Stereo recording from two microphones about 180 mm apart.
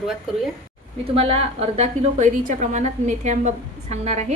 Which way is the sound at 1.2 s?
35° right (ahead or behind).